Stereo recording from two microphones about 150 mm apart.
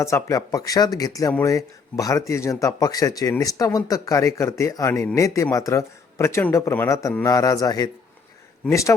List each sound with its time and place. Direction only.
0.0 s speech: 20° left (ahead or behind)